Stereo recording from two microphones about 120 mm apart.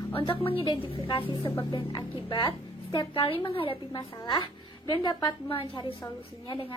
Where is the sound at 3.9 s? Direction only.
35° left (ahead or behind).